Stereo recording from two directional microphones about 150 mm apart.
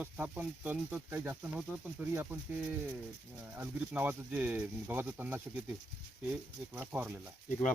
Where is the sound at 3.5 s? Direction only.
15° right (ahead or behind).